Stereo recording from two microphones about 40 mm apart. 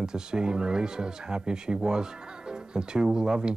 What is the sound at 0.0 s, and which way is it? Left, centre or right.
Speech, centre.